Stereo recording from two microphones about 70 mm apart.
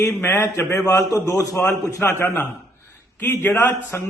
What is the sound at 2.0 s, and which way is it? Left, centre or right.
Speech, left.